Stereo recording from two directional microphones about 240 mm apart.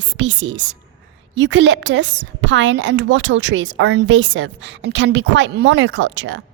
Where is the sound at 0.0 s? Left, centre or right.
Right.